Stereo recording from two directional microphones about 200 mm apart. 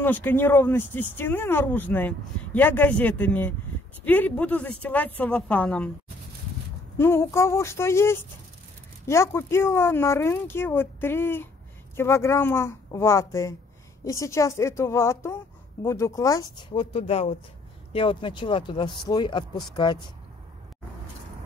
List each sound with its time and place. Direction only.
0.0 s speech: 10° left (ahead or behind)
7.0 s speech: 15° left (ahead or behind)
16.9 s speech: 30° left (ahead or behind)